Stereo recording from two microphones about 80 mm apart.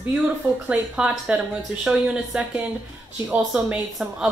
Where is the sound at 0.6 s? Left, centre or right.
Centre.